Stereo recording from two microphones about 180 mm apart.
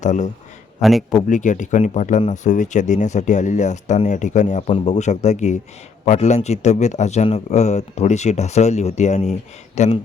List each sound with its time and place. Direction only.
0.0 s speech: 40° left (ahead or behind)
0.8 s a man's voice: centre (ahead or behind)
1.3 s a man's voice: 45° left (ahead or behind)